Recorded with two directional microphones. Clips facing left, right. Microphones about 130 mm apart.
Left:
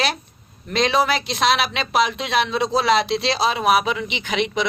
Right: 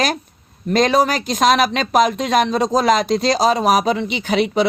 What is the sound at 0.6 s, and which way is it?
Speech, 45° right (ahead or behind).